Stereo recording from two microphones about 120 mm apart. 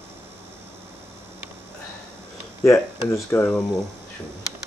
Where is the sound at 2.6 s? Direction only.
25° left (ahead or behind).